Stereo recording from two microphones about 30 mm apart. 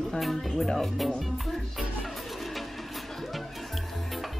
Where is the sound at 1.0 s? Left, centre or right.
Centre.